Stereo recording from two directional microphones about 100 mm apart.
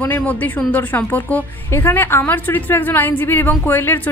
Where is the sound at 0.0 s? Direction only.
15° left (ahead or behind).